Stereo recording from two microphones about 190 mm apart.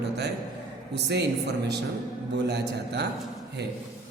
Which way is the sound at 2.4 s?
60° right (ahead or behind).